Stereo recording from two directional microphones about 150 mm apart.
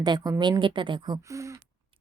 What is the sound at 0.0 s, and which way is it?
Speech, 30° right (ahead or behind).